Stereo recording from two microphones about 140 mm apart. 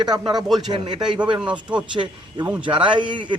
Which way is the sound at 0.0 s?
30° right (ahead or behind).